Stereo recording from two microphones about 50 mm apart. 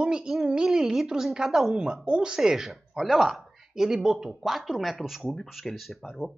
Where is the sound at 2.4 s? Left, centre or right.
Centre.